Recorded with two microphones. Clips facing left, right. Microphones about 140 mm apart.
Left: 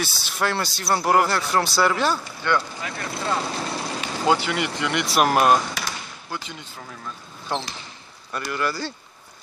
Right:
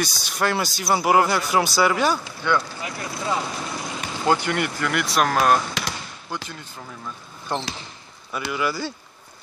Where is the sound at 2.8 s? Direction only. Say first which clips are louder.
Even; 20° right (ahead or behind).